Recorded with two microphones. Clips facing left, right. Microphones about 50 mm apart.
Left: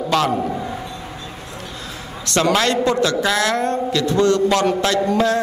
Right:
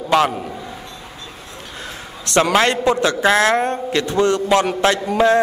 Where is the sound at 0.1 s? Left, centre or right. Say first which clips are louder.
Right 3 dB; centre.